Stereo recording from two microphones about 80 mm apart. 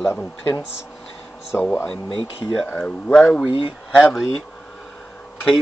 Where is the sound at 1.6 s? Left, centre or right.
Left.